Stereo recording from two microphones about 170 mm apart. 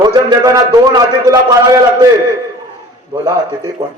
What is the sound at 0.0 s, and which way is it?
A man's voice, 25° right (ahead or behind).